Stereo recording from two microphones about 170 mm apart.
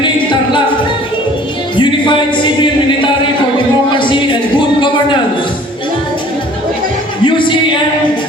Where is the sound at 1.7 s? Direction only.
30° left (ahead or behind).